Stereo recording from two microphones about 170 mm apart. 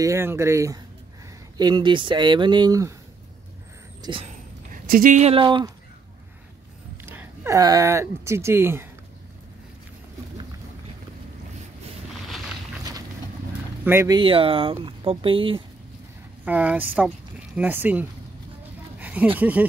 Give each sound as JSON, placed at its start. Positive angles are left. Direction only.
{"t": 0.0, "sound": "speech", "side_deg": -15}
{"t": 4.0, "sound": "speech", "side_deg": -30}
{"t": 4.8, "sound": "speech", "side_deg": -55}
{"t": 5.2, "sound": "speech", "side_deg": -30}
{"t": 7.1, "sound": "speech", "side_deg": -15}
{"t": 13.8, "sound": "speech", "side_deg": -15}
{"t": 14.1, "sound": "speech", "side_deg": -30}
{"t": 16.4, "sound": "speech", "side_deg": -10}